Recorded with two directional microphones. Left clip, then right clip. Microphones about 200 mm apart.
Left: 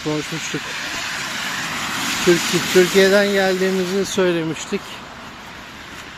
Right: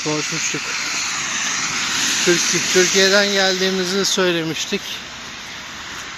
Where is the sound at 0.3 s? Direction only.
50° left (ahead or behind).